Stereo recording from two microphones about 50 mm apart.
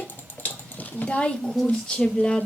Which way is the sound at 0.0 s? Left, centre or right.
Left.